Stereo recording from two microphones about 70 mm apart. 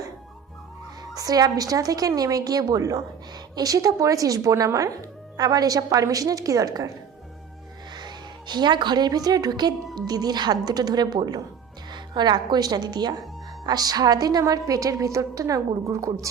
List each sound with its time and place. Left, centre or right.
1.1 s a woman's voice: right
3.3 s a woman's voice: right
5.4 s a woman's voice: right
7.9 s speech: right
10.7 s a woman's voice: right
11.9 s a woman's voice: right
13.7 s a woman's voice: right